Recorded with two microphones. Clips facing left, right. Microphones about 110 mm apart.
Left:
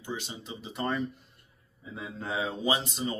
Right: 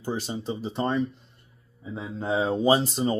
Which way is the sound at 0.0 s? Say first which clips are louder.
Right 8 dB; 35° right (ahead or behind).